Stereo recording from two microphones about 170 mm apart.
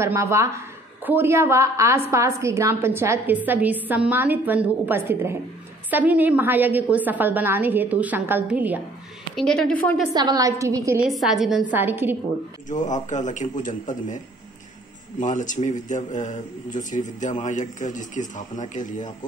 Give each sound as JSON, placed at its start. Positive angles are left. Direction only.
{"t": 0.0, "sound": "a woman's voice", "side_deg": -15}
{"t": 9.3, "sound": "a woman's voice", "side_deg": 0}
{"t": 10.1, "sound": "a woman's voice", "side_deg": -25}
{"t": 11.0, "sound": "a woman's voice", "side_deg": 0}
{"t": 12.6, "sound": "a man's voice", "side_deg": 45}